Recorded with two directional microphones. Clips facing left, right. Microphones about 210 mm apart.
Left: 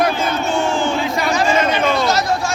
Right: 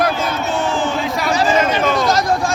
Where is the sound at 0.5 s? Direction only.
Centre (ahead or behind).